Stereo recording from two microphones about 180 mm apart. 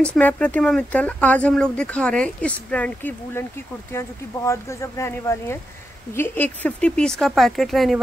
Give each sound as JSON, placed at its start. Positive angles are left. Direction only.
{"t": 0.0, "sound": "speech", "side_deg": 5}